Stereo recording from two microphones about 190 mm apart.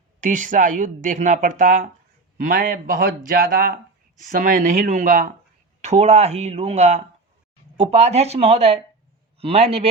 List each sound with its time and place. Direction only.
0.2 s speech: 45° right (ahead or behind)